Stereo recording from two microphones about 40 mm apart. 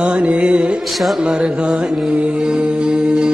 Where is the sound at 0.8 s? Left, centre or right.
Centre.